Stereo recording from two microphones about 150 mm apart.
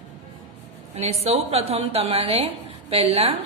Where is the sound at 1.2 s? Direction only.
40° right (ahead or behind).